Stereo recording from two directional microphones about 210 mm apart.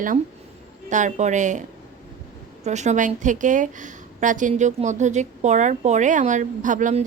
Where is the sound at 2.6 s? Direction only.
35° right (ahead or behind).